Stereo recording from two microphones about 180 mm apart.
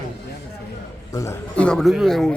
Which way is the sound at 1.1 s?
15° left (ahead or behind).